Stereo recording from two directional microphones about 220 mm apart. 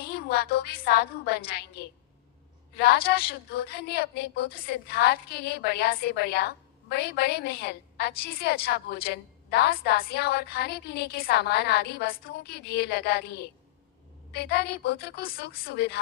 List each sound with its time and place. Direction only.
0.1 s a woman's voice: 45° left (ahead or behind)